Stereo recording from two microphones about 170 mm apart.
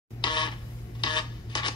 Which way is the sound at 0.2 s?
25° left (ahead or behind).